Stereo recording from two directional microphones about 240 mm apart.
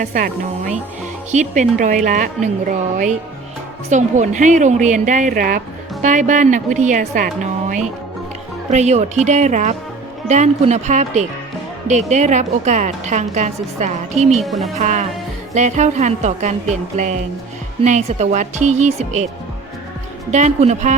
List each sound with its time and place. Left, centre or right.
0.0 s a woman's voice: right
14.4 s speech: centre
14.8 s a woman's voice: right
20.3 s a woman's voice: right